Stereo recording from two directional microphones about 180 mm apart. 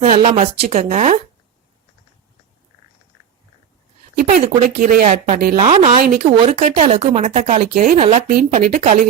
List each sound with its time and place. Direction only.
0.0 s a woman's voice: 40° right (ahead or behind)
4.1 s a woman's voice: 50° right (ahead or behind)
5.5 s speech: 35° right (ahead or behind)
6.6 s speech: 40° right (ahead or behind)
7.9 s speech: 35° right (ahead or behind)
8.3 s a woman's voice: 55° right (ahead or behind)
8.5 s speech: 40° right (ahead or behind)